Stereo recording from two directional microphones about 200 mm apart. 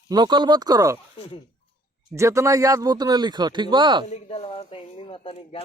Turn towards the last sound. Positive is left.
turn(degrees=30)  # may be behind; listen again after turning